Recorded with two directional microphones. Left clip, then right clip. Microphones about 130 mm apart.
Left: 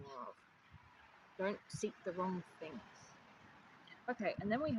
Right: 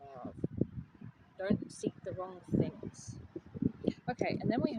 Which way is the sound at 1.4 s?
20° right (ahead or behind).